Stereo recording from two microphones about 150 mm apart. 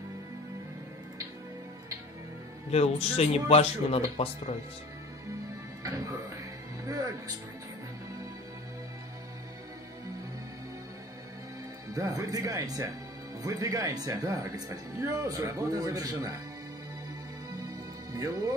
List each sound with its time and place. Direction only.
2.7 s speech: 45° left (ahead or behind)
5.9 s music: 20° right (ahead or behind)
11.9 s speech: 20° right (ahead or behind)
18.1 s speech: 20° right (ahead or behind)